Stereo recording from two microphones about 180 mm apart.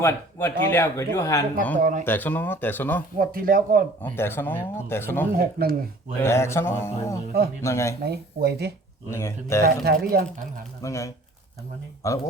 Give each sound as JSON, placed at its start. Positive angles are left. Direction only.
{"t": 0.0, "sound": "speech", "side_deg": 10}
{"t": 1.8, "sound": "speech", "side_deg": -45}
{"t": 2.0, "sound": "speech", "side_deg": 10}
{"t": 3.2, "sound": "speech", "side_deg": -50}
{"t": 4.0, "sound": "speech", "side_deg": 10}
{"t": 5.3, "sound": "speech", "side_deg": -55}
{"t": 6.2, "sound": "speech", "side_deg": 15}
{"t": 8.0, "sound": "speech", "side_deg": -65}
{"t": 9.0, "sound": "speech", "side_deg": 15}
{"t": 9.6, "sound": "speech", "side_deg": -60}
{"t": 10.8, "sound": "speech", "side_deg": 15}